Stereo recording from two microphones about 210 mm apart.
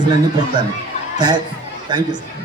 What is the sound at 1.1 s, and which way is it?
Speech, 20° right (ahead or behind).